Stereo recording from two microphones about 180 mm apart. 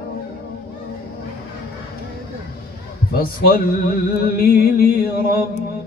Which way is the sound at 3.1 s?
55° left (ahead or behind).